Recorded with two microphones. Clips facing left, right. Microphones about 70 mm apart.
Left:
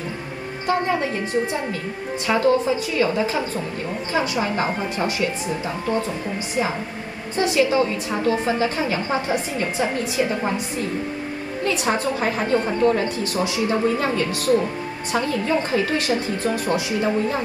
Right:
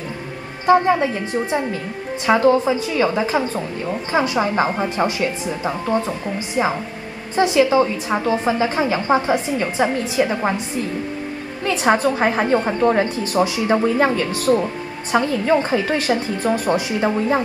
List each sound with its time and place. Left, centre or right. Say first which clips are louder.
0.7 s speech: right 7 dB; right
11.7 s a woman's voice: right 7 dB; right